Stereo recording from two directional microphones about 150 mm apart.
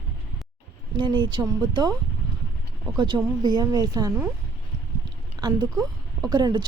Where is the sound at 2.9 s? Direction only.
30° right (ahead or behind).